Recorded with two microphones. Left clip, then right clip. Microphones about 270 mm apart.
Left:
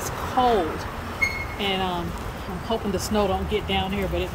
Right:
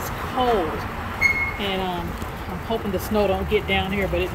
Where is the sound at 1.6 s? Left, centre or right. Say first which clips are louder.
Even; centre.